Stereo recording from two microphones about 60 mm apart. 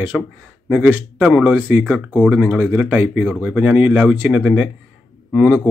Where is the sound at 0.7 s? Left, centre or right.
Right.